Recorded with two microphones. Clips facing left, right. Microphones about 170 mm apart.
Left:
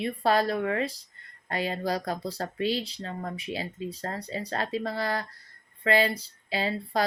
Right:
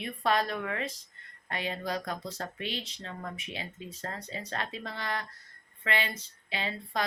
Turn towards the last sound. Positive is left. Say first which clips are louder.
# left 6 dB
turn(degrees=35)  # may be behind; listen again after turning